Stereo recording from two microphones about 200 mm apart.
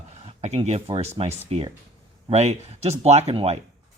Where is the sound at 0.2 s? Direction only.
35° right (ahead or behind).